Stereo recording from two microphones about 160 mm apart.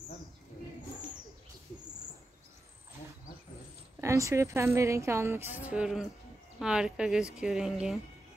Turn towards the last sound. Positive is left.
turn(degrees=-5)  # may be behind; listen again after turning